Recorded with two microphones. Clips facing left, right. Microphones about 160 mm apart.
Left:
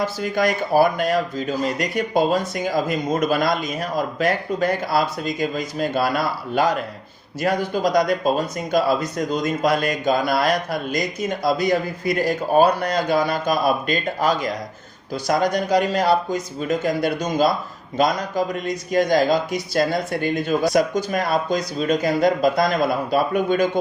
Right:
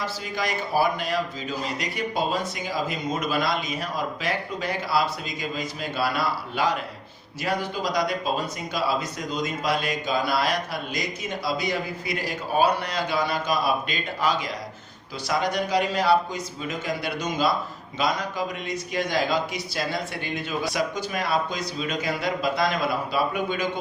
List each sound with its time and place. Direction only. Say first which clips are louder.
0.0 s speech: left 8 dB; 50° left (ahead or behind)